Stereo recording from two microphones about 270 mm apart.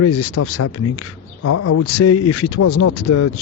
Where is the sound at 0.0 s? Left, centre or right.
Left.